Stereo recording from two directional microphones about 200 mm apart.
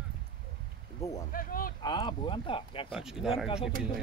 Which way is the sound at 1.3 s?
45° left (ahead or behind).